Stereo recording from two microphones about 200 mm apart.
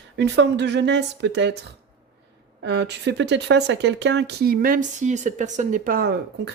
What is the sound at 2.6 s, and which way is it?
Speech, 60° right (ahead or behind).